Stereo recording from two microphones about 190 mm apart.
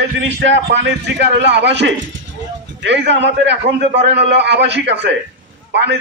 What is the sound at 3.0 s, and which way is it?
A man's voice, 65° right (ahead or behind).